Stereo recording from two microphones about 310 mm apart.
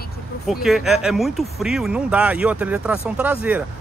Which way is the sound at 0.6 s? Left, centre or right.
Centre.